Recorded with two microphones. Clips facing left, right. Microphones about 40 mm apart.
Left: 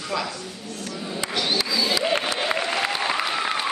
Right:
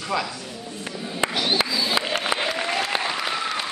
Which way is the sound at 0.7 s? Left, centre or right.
Right.